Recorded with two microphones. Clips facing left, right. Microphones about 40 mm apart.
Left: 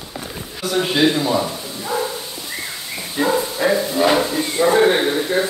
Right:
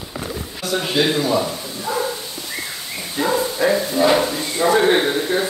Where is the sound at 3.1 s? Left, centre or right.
Centre.